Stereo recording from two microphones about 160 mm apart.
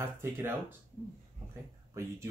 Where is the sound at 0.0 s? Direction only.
15° right (ahead or behind).